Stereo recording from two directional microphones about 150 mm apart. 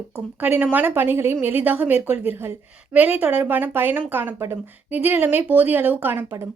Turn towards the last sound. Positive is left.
turn(degrees=-15)  # may be behind; listen again after turning